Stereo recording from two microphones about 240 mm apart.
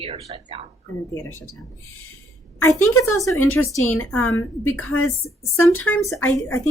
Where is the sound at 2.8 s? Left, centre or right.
Centre.